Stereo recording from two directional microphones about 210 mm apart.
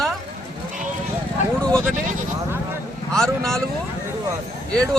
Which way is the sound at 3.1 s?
5° left (ahead or behind).